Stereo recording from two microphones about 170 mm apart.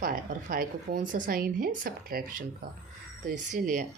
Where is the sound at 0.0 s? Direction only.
60° right (ahead or behind).